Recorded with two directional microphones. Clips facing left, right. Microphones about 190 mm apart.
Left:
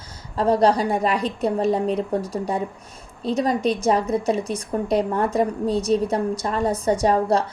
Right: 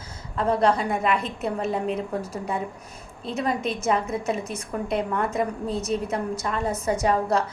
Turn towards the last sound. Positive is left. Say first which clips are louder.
# left 3 dB
turn(degrees=35)  # may be behind; listen again after turning